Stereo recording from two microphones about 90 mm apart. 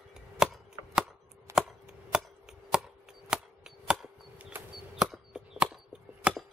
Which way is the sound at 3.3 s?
5° right (ahead or behind).